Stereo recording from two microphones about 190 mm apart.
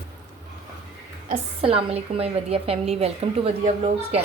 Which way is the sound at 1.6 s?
30° right (ahead or behind).